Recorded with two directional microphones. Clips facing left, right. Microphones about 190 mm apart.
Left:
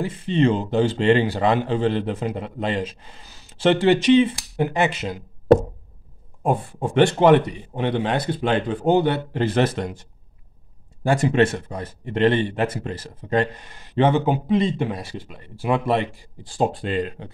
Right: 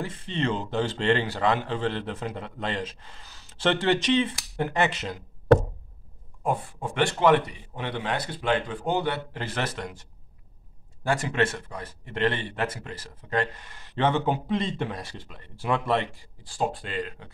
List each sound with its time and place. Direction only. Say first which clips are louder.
0.0 s a man's voice: left 9 dB; 10° left (ahead or behind)
6.4 s speech: left 6 dB; 25° left (ahead or behind)
11.1 s speech: left 7 dB; 20° left (ahead or behind)